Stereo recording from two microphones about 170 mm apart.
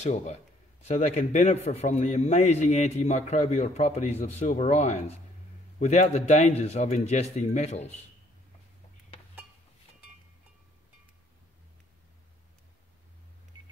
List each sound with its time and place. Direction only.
0.0 s a man's voice: 45° left (ahead or behind)